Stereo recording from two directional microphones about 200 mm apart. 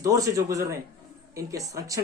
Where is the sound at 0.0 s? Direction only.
15° right (ahead or behind).